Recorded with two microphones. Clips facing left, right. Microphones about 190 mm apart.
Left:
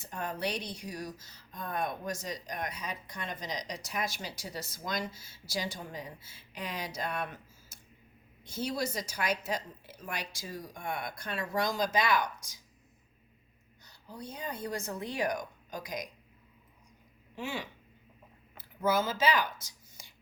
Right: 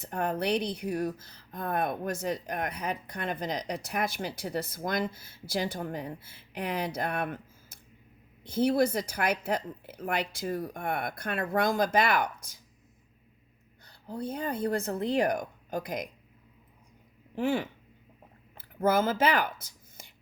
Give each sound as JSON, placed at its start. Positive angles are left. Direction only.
{"t": 0.0, "sound": "a woman's voice", "side_deg": -55}
{"t": 13.8, "sound": "a woman's voice", "side_deg": -55}
{"t": 17.3, "sound": "speech", "side_deg": -55}
{"t": 18.8, "sound": "a woman's voice", "side_deg": -55}